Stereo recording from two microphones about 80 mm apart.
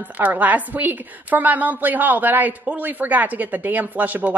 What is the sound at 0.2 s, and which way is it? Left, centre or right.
A woman's voice, right.